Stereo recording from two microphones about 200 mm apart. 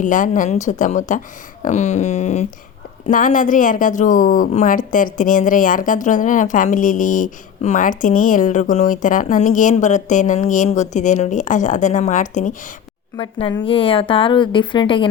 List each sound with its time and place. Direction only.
0.0 s a woman's voice: 40° left (ahead or behind)
13.1 s a woman's voice: 25° left (ahead or behind)